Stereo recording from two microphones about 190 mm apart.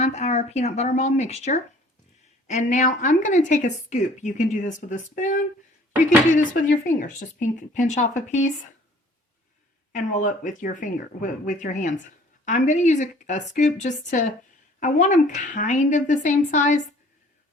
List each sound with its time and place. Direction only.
0.0 s a woman's voice: 35° left (ahead or behind)
9.9 s a woman's voice: 40° left (ahead or behind)